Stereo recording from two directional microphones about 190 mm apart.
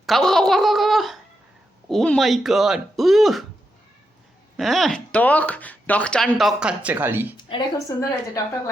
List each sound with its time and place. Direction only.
0.0 s speech: centre (ahead or behind)
4.5 s speech: centre (ahead or behind)
7.5 s a woman's voice: 15° left (ahead or behind)